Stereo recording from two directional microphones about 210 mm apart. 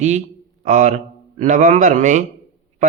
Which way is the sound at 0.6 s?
35° right (ahead or behind).